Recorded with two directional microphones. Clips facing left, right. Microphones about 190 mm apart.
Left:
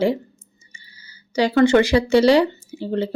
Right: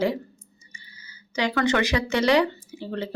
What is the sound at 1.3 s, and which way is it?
Speech, 30° left (ahead or behind).